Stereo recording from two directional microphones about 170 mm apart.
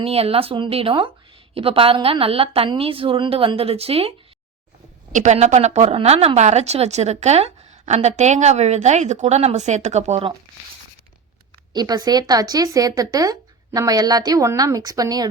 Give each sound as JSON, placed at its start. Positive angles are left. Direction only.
{"t": 0.0, "sound": "speech", "side_deg": -35}
{"t": 5.1, "sound": "speech", "side_deg": -45}
{"t": 11.7, "sound": "speech", "side_deg": -25}